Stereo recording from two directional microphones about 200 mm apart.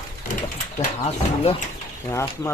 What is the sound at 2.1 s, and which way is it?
Speech, 15° left (ahead or behind).